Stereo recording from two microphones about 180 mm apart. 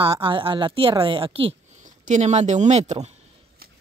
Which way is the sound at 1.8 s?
45° right (ahead or behind).